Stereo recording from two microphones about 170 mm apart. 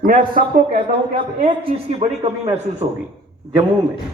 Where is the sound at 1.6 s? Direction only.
35° right (ahead or behind).